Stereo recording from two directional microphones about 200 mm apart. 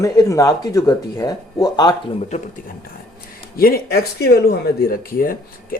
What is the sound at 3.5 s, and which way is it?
Speech, 50° left (ahead or behind).